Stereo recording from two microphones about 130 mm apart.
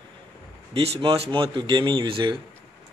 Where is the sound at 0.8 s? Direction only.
45° right (ahead or behind).